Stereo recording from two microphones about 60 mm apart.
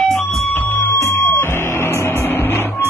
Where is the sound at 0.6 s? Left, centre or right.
Left.